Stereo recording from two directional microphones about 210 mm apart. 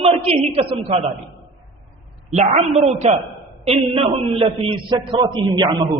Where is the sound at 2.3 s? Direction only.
30° right (ahead or behind).